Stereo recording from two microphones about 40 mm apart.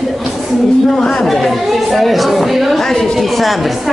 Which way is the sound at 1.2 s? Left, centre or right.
Centre.